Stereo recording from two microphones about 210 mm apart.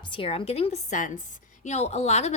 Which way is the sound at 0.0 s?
25° left (ahead or behind).